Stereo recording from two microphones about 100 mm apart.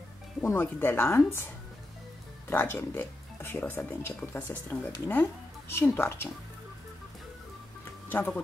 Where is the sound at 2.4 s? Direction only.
25° left (ahead or behind).